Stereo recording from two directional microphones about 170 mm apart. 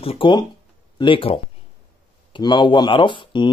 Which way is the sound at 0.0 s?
30° left (ahead or behind).